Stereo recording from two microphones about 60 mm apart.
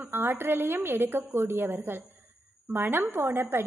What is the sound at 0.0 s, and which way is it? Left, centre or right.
A woman's voice, right.